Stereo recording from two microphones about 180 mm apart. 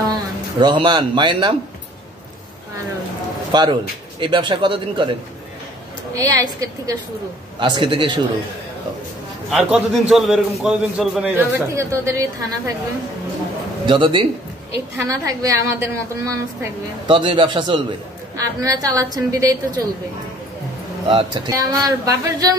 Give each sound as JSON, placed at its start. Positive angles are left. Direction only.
{"t": 0.0, "sound": "speech", "side_deg": -25}
{"t": 3.5, "sound": "a woman's voice", "side_deg": -25}
{"t": 6.1, "sound": "a woman's voice", "side_deg": -20}
{"t": 9.5, "sound": "a man's voice", "side_deg": -5}
{"t": 13.8, "sound": "a woman's voice", "side_deg": -30}
{"t": 17.1, "sound": "a woman's voice", "side_deg": -25}
{"t": 21.1, "sound": "a woman's voice", "side_deg": -30}